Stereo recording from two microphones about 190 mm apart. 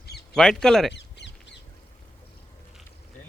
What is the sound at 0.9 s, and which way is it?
Crow, 65° left (ahead or behind).